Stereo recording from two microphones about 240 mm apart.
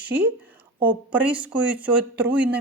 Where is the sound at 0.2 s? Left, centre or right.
Centre.